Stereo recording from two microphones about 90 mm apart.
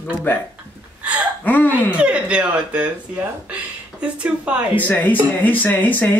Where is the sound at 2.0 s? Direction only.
10° right (ahead or behind).